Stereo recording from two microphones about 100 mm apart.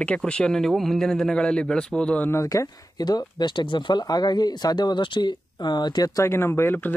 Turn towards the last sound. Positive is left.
turn(degrees=20)  # may be behind; listen again after turning